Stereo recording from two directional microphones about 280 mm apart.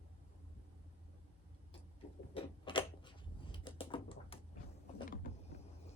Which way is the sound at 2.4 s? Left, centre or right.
Centre.